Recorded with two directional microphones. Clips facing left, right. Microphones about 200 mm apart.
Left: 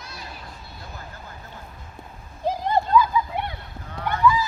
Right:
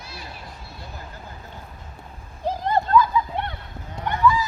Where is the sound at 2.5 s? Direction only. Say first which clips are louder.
Even; 15° left (ahead or behind).